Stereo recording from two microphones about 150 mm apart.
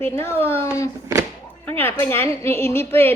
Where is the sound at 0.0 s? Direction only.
15° left (ahead or behind).